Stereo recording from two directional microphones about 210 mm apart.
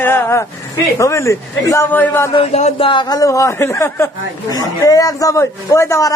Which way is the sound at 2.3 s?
30° left (ahead or behind).